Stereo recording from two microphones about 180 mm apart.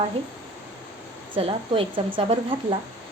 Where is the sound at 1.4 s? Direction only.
30° right (ahead or behind).